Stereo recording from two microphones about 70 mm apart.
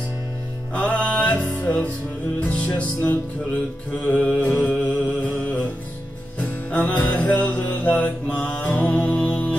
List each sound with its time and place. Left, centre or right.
0.7 s music: left
4.0 s a sound: left
6.7 s music: left